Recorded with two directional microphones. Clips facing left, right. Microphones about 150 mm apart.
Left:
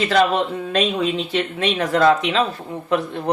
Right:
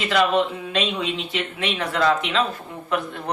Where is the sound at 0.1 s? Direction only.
40° left (ahead or behind).